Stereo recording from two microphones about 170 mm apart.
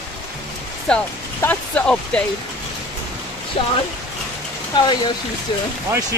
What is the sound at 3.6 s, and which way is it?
Speech, 35° left (ahead or behind).